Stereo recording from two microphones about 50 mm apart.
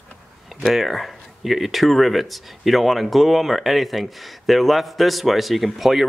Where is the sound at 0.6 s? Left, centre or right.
Centre.